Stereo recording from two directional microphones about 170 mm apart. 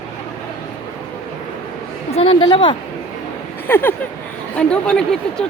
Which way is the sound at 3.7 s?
10° left (ahead or behind).